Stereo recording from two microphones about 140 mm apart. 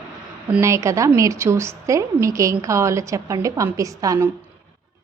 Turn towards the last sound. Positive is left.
turn(degrees=-25)  # may be behind; listen again after turning